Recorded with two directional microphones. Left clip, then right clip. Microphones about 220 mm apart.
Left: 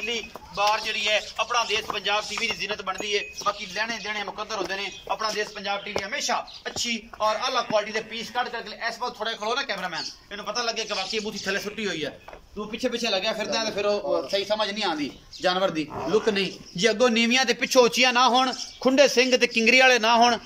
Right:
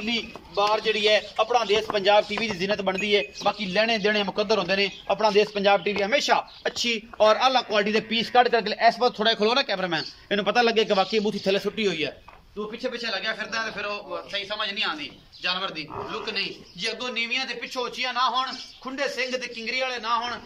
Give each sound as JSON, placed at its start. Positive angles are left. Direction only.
{"t": 0.0, "sound": "a man's voice", "side_deg": -20}
{"t": 12.8, "sound": "a man's voice", "side_deg": 15}